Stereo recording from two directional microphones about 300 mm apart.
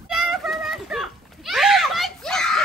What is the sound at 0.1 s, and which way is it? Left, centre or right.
Children playing, centre.